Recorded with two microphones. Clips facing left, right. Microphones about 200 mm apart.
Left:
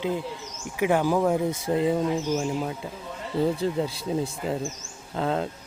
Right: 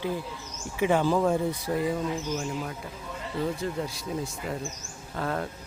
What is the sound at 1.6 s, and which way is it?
Speech, 25° left (ahead or behind).